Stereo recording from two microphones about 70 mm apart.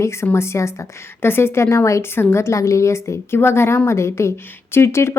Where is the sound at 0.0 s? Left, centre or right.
Left.